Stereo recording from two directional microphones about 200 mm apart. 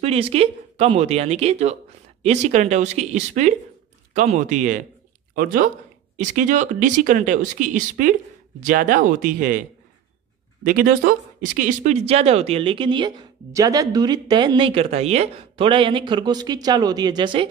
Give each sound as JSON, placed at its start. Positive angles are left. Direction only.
{"t": 0.0, "sound": "speech", "side_deg": -30}